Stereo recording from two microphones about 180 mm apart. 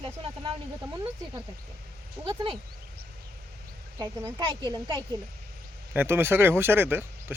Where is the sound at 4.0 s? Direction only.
15° right (ahead or behind).